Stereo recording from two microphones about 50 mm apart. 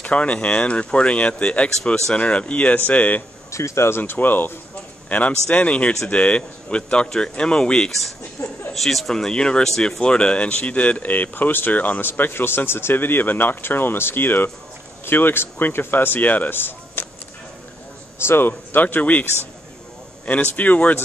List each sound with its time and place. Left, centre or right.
0.0 s speech: left
3.5 s speech: left
4.0 s speech: left
5.1 s speech: left
8.4 s a sound: left
8.7 s speech: centre; by 12.1 s left
12.1 s speech: left
18.2 s speech: left
18.5 s speech: left
20.5 s speech: left